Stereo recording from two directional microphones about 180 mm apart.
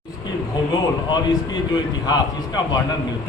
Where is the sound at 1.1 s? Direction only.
25° left (ahead or behind).